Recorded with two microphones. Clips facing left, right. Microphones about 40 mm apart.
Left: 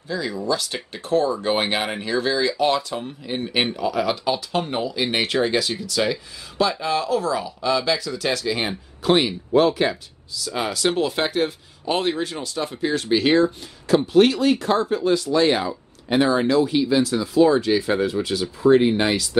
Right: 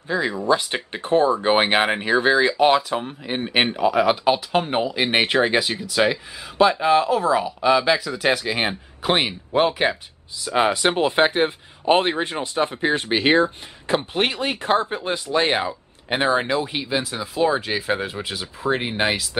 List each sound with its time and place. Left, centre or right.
0.1 s speech: right